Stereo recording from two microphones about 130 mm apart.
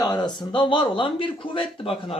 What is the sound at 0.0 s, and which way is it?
Speech, 35° left (ahead or behind).